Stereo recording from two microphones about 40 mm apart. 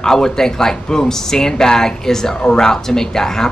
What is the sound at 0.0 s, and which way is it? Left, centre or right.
Speech, centre.